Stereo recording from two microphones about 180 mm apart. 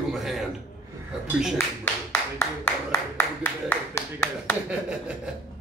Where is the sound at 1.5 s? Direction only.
10° left (ahead or behind).